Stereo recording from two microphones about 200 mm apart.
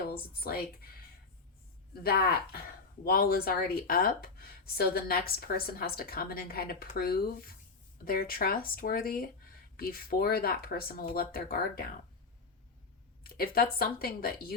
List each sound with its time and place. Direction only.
0.0 s speech: 50° left (ahead or behind)
1.9 s speech: 50° left (ahead or behind)
13.2 s speech: 50° left (ahead or behind)